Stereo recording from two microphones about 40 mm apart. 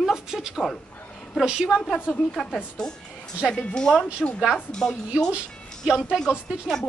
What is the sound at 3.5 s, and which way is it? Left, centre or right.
Speech, left.